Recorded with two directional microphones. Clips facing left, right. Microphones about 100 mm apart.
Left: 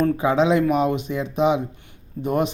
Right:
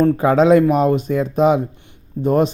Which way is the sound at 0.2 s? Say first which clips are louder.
Right 6 dB; 45° right (ahead or behind).